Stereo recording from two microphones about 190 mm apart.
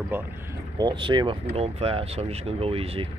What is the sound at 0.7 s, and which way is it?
Speech, 25° right (ahead or behind).